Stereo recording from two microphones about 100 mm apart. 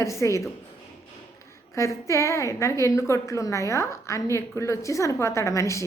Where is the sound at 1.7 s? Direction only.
30° left (ahead or behind).